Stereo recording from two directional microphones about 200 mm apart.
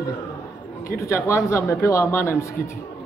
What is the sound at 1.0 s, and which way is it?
A man's voice, 15° left (ahead or behind).